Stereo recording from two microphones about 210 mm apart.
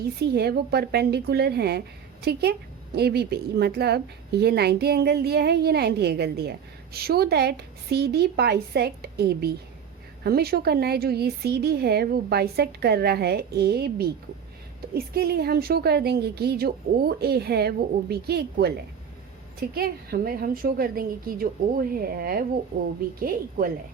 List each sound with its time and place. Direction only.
0.0 s a woman's voice: 50° right (ahead or behind)